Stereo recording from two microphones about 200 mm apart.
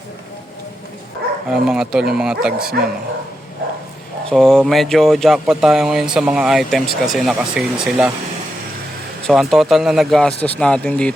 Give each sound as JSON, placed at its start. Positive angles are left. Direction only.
{"t": 1.5, "sound": "speech", "side_deg": -5}
{"t": 4.3, "sound": "speech", "side_deg": 0}
{"t": 9.2, "sound": "speech", "side_deg": 0}